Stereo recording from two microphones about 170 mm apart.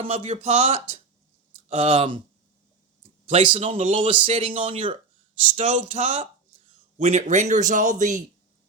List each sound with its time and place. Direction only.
0.0 s speech: 40° right (ahead or behind)
3.2 s speech: 35° right (ahead or behind)
5.5 s a man's voice: 45° right (ahead or behind)